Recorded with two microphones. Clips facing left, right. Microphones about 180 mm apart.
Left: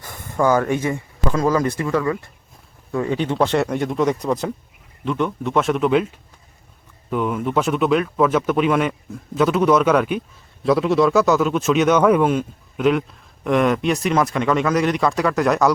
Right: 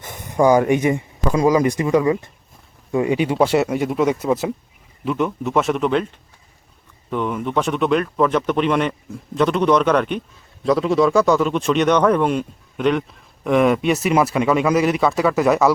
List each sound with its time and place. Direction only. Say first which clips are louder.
0.0 s speech: right 3 dB; 20° right (ahead or behind); by 15.7 s 5° right (ahead or behind)